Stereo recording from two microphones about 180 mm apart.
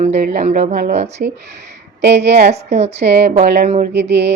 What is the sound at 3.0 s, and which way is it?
A woman's voice, 70° right (ahead or behind).